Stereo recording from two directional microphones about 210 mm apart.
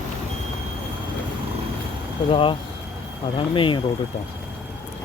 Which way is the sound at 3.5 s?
25° left (ahead or behind).